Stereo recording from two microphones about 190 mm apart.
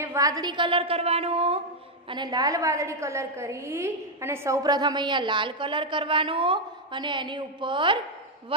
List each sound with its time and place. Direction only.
0.0 s a woman's voice: 15° right (ahead or behind)